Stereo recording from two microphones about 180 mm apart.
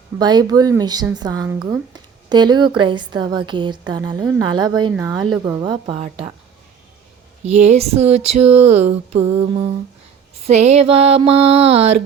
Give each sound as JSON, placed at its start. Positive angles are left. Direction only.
{"t": 0.2, "sound": "a woman's voice", "side_deg": -20}
{"t": 1.5, "sound": "speech", "side_deg": -10}
{"t": 1.9, "sound": "a woman's voice", "side_deg": -25}
{"t": 7.4, "sound": "a sound", "side_deg": -40}